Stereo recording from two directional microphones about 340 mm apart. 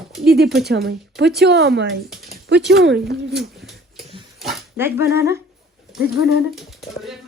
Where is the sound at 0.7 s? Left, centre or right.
Right.